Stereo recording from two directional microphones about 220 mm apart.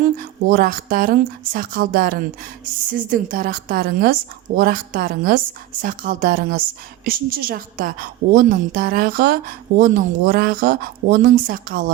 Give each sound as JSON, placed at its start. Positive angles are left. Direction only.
{"t": 0.2, "sound": "a woman's voice", "side_deg": -40}